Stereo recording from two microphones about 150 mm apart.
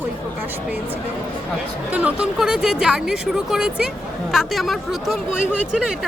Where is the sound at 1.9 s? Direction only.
10° right (ahead or behind).